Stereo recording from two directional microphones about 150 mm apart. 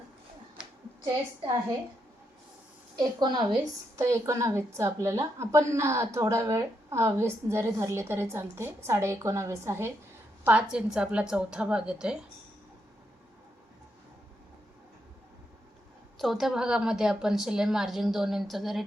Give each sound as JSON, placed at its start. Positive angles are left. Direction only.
{"t": 3.0, "sound": "a woman's voice", "side_deg": -30}
{"t": 16.1, "sound": "a woman's voice", "side_deg": 0}